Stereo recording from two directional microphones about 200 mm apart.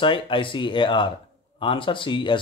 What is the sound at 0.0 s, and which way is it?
Speech, 25° left (ahead or behind).